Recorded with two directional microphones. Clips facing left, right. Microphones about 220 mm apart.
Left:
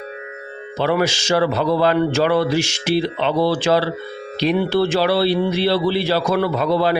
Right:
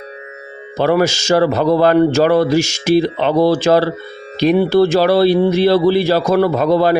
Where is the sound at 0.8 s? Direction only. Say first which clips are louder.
Right 5 dB; 45° right (ahead or behind).